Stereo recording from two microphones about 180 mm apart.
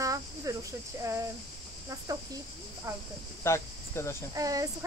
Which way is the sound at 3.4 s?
15° left (ahead or behind).